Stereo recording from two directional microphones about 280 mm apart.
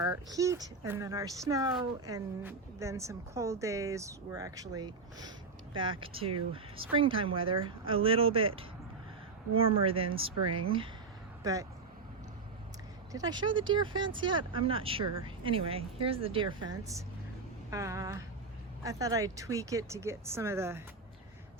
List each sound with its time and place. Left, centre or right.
0.0 s a woman's voice: centre
13.1 s a woman's voice: centre
17.7 s a woman's voice: centre